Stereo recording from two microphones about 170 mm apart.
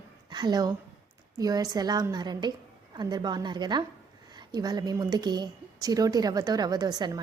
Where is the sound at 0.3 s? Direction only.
25° right (ahead or behind).